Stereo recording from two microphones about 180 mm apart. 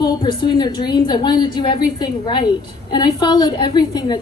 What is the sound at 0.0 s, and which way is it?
A woman's voice, 25° left (ahead or behind).